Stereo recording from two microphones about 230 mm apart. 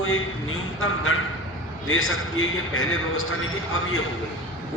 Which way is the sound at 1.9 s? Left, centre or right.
Left.